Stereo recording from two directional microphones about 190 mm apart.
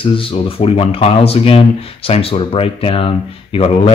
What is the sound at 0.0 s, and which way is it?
Speech, 25° left (ahead or behind).